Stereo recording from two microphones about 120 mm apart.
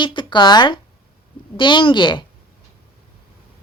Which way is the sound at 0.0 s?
40° left (ahead or behind).